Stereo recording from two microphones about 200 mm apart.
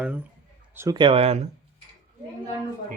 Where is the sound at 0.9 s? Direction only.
25° right (ahead or behind).